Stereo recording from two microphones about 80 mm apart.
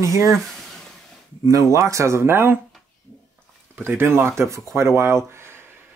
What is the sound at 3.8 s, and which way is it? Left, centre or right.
Speech, right.